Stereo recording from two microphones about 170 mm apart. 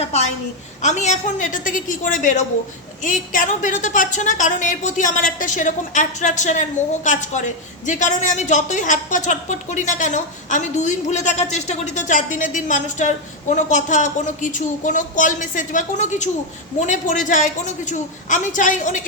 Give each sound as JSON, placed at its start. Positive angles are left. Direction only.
{"t": 0.8, "sound": "a woman's voice", "side_deg": 45}